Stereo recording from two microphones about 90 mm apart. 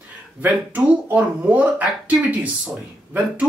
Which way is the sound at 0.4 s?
20° right (ahead or behind).